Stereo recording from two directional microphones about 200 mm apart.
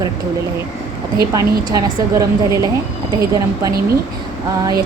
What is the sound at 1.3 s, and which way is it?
Speech, 15° right (ahead or behind).